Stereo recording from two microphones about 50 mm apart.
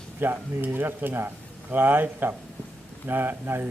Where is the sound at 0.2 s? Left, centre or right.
Right.